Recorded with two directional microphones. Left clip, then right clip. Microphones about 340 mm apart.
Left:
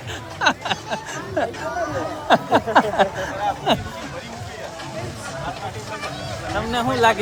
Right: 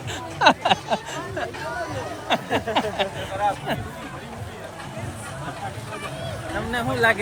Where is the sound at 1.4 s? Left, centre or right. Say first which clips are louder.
Left 8 dB; centre.